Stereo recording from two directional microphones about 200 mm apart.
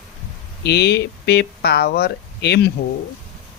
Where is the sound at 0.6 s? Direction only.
55° left (ahead or behind).